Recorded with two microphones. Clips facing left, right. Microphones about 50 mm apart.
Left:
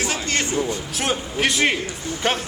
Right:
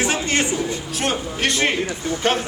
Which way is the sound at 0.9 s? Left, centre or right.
Centre.